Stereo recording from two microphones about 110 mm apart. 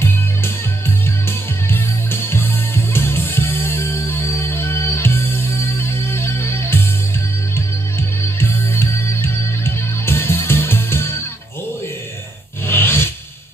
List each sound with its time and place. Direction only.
2.2 s music: 20° left (ahead or behind)
8.4 s music: 20° left (ahead or behind)
12.6 s roar: 20° left (ahead or behind)